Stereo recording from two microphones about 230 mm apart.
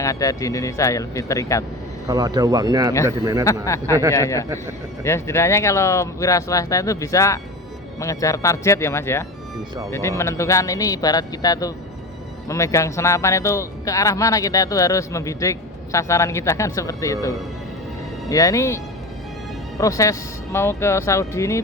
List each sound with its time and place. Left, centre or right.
0.0 s speech: centre
2.0 s speech: centre
3.4 s speech: centre
4.4 s speech: centre
5.0 s speech: centre
19.8 s speech: centre